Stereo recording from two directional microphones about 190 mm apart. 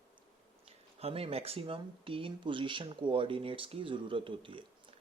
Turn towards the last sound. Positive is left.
turn(degrees=-25)  # may be behind; listen again after turning